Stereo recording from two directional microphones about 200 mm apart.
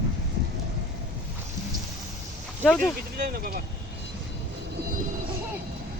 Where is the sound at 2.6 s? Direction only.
5° left (ahead or behind).